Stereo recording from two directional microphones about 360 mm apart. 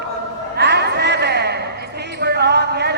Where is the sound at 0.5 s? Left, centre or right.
Right.